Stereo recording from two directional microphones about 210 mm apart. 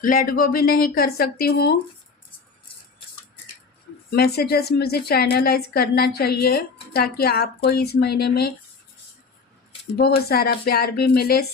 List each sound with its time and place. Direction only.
0.0 s a woman's voice: 40° left (ahead or behind)
4.1 s a woman's voice: 50° left (ahead or behind)
10.0 s a woman's voice: 45° left (ahead or behind)